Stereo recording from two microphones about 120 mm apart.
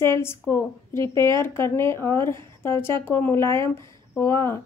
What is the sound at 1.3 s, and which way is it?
A woman's voice, 20° left (ahead or behind).